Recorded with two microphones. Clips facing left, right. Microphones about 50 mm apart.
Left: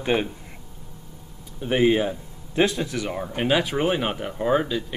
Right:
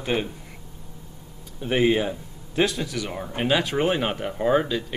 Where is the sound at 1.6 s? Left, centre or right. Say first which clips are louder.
Left 1 dB; centre.